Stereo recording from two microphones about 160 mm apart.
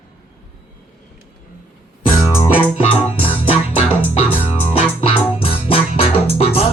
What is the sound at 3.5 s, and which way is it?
Music, 15° right (ahead or behind).